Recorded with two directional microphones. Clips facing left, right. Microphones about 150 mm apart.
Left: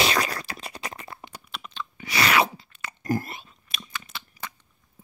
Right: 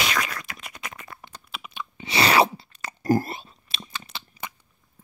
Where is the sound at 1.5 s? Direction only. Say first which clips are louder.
Even; 10° right (ahead or behind).